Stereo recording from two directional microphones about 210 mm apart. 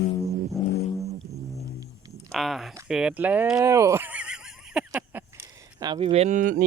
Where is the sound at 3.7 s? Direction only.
15° right (ahead or behind).